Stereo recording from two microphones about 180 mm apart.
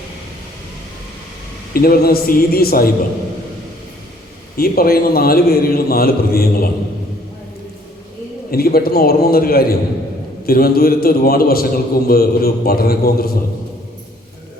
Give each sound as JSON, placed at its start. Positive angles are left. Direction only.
{"t": 1.7, "sound": "a man's voice", "side_deg": 55}
{"t": 4.5, "sound": "a man's voice", "side_deg": 55}
{"t": 8.4, "sound": "a man's voice", "side_deg": 55}